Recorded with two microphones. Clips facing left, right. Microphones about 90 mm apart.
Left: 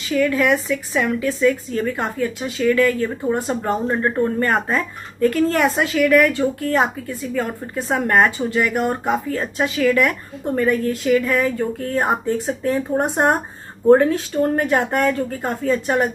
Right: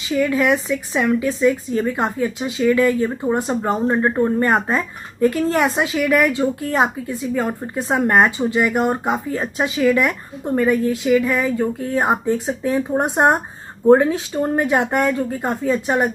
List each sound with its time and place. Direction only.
0.1 s a woman's voice: 10° right (ahead or behind)
3.3 s speech: centre (ahead or behind)
3.8 s a woman's voice: 15° right (ahead or behind)
4.5 s a woman's voice: 5° right (ahead or behind)
12.9 s speech: 20° right (ahead or behind)
13.8 s speech: 10° right (ahead or behind)